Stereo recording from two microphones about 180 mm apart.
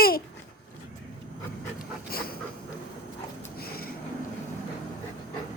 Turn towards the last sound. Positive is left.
turn(degrees=55)  # may be behind; listen again after turning